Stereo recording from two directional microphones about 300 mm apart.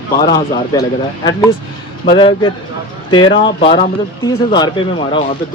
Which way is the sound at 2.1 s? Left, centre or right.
Centre.